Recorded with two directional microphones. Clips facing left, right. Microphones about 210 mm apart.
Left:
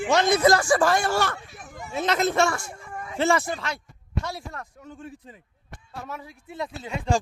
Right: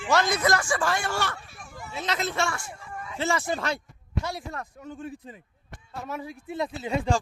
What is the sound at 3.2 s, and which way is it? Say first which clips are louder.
Speech: left 5 dB; 60° left (ahead or behind).